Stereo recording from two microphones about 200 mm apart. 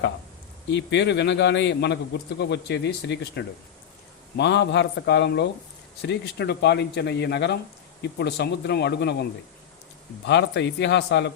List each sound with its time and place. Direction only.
0.7 s speech: 60° left (ahead or behind)
10.2 s speech: 60° left (ahead or behind)